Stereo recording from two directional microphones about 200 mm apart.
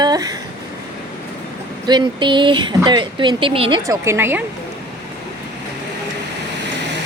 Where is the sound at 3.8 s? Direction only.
15° right (ahead or behind).